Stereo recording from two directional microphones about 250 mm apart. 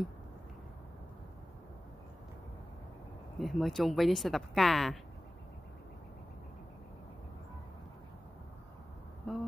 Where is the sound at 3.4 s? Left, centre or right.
Centre.